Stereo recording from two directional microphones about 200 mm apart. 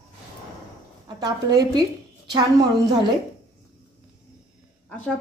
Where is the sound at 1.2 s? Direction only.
20° right (ahead or behind).